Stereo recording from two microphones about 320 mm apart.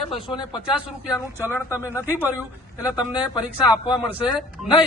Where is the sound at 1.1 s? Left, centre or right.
Centre.